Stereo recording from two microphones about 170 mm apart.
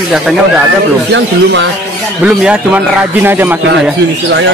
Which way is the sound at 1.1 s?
90° right.